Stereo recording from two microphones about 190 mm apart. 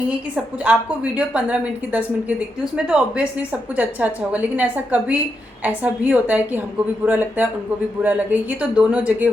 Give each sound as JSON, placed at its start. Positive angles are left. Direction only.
{"t": 0.3, "sound": "a woman's voice", "side_deg": -5}